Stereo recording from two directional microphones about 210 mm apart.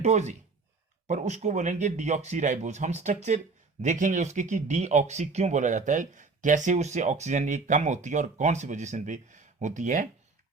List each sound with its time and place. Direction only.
0.0 s speech: 35° right (ahead or behind)